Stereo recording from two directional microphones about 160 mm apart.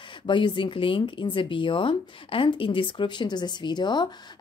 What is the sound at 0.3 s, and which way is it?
Speech, 30° left (ahead or behind).